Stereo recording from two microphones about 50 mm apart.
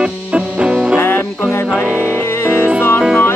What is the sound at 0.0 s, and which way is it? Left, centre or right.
Music, centre.